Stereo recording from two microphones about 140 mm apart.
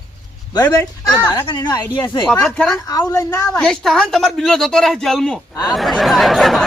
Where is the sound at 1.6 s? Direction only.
30° left (ahead or behind).